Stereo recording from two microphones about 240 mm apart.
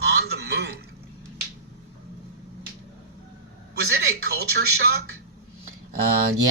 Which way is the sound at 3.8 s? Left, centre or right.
Right.